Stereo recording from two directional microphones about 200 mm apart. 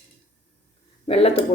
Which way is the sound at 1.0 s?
30° left (ahead or behind).